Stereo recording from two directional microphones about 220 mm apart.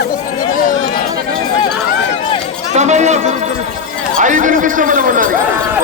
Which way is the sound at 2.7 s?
30° right (ahead or behind).